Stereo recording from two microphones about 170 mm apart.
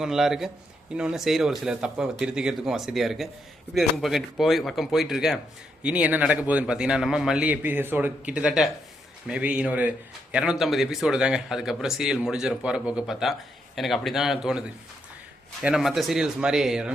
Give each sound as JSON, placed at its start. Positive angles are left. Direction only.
{"t": 0.0, "sound": "a man's voice", "side_deg": 0}
{"t": 15.6, "sound": "a man's voice", "side_deg": -5}